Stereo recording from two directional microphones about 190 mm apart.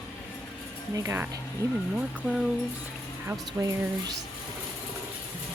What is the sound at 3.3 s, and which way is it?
Speech, 15° right (ahead or behind).